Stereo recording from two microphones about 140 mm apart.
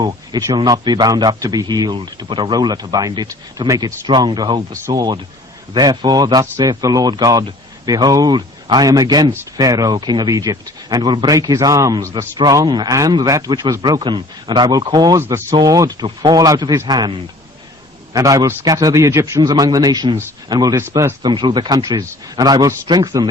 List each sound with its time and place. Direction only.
0.0 s speech: 30° right (ahead or behind)
15.2 s speech: 20° right (ahead or behind)
18.1 s speech: 25° right (ahead or behind)
21.2 s speech: 35° right (ahead or behind)